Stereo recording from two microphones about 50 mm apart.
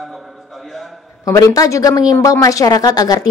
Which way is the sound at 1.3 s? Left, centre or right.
Left.